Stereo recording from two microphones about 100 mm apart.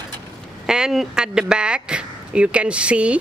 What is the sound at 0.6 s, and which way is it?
Speech, 5° right (ahead or behind).